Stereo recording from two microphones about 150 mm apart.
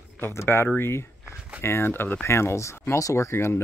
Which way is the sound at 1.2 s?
5° right (ahead or behind).